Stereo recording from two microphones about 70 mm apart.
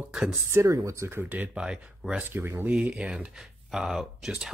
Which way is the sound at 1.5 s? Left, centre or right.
Centre.